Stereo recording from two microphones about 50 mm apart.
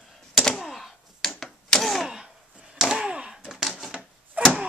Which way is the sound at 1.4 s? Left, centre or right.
Centre.